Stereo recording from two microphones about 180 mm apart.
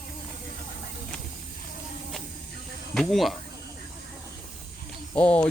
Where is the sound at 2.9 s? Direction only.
Centre (ahead or behind).